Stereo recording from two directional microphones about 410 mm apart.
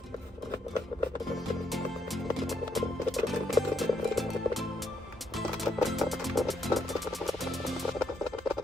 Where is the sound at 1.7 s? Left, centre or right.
Centre.